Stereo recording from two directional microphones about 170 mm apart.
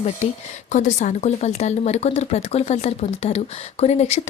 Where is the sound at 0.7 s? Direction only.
45° left (ahead or behind).